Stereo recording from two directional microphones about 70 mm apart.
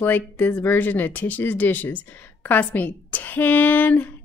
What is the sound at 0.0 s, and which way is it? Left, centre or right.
Speech, left.